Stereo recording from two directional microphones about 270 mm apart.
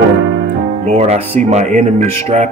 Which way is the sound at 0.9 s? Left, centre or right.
Right.